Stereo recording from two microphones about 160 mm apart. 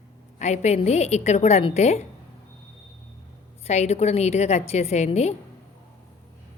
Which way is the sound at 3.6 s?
45° left (ahead or behind).